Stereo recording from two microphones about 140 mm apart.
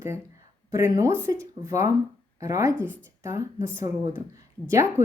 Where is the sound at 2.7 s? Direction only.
10° left (ahead or behind).